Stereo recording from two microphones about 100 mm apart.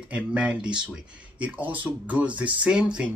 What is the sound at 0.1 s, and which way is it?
Speech, 10° right (ahead or behind).